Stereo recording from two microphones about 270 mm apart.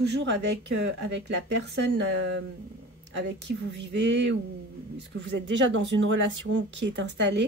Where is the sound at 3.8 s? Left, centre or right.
Right.